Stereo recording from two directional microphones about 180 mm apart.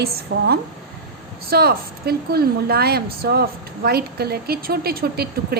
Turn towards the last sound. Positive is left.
turn(degrees=-60)  # may be behind; listen again after turning